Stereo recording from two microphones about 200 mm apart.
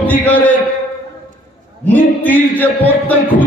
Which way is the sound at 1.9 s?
10° left (ahead or behind).